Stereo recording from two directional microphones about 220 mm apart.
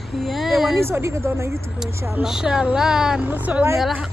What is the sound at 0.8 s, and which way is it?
Speech, 10° right (ahead or behind).